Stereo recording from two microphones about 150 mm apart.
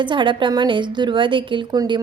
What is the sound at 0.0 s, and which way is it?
A woman's voice, 35° right (ahead or behind).